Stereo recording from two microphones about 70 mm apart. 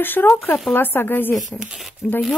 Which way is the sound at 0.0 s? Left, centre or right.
Left.